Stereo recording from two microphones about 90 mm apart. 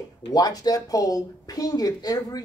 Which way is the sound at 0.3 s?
45° left (ahead or behind).